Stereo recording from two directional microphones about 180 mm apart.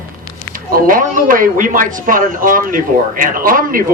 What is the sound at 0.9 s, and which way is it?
A man's voice, 50° right (ahead or behind).